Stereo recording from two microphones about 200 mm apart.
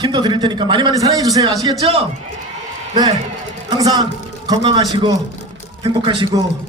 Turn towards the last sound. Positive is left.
turn(degrees=-25)  # may be behind; listen again after turning